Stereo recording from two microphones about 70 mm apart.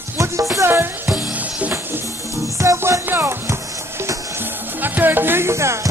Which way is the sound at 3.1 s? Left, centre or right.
Right.